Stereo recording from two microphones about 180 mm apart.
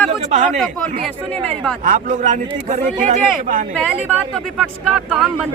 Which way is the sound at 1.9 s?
45° right (ahead or behind).